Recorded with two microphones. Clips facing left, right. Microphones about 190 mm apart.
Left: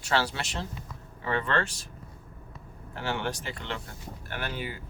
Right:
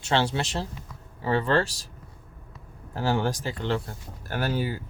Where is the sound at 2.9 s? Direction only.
40° right (ahead or behind).